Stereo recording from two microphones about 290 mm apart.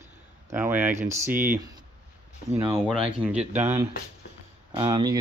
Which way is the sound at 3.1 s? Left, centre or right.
Centre.